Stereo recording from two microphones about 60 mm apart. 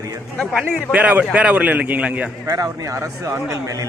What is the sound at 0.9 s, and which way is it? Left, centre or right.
A man's voice, right.